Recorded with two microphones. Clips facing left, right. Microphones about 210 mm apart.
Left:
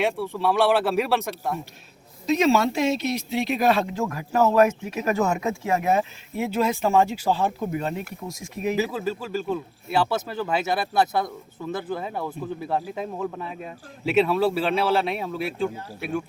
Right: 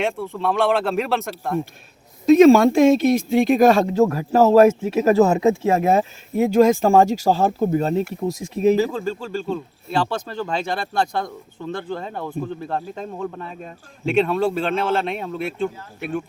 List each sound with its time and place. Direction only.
0.0 s speech: 5° left (ahead or behind)
2.2 s speech: 50° right (ahead or behind); by 8.0 s 35° right (ahead or behind)
8.0 s speech: centre (ahead or behind)